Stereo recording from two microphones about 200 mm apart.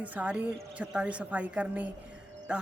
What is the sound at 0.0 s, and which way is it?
A woman's voice, 10° right (ahead or behind).